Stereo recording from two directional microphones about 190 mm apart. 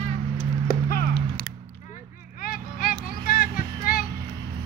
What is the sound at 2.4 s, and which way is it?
Vehicle, 50° left (ahead or behind).